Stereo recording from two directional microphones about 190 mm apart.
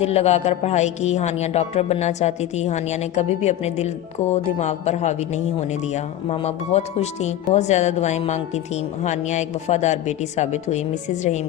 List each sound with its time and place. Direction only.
0.0 s speech: 35° left (ahead or behind)